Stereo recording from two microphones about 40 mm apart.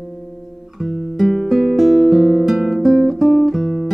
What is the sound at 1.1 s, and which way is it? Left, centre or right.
Music, centre.